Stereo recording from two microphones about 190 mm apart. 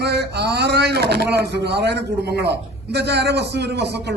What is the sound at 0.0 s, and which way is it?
A man's voice, 60° right (ahead or behind).